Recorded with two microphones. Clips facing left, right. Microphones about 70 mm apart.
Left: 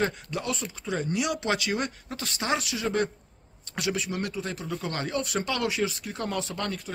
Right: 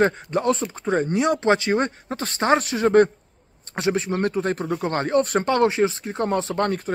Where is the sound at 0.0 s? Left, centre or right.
Right.